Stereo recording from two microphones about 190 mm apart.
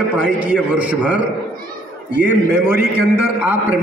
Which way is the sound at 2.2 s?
10° right (ahead or behind).